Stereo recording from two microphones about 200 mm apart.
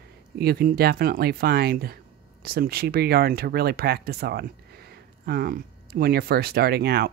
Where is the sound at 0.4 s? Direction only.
50° right (ahead or behind).